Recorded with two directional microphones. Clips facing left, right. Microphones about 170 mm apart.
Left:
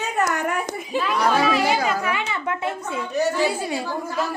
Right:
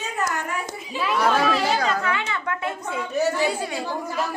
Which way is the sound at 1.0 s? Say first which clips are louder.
Even; 5° right (ahead or behind).